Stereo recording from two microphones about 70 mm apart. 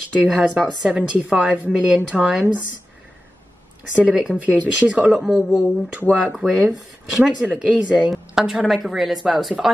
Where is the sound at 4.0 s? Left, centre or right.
Centre.